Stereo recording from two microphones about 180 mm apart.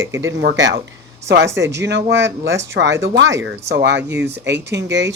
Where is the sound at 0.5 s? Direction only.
90° right.